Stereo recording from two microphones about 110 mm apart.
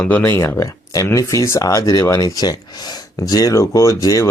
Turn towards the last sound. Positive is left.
turn(degrees=30)  # may be behind; listen again after turning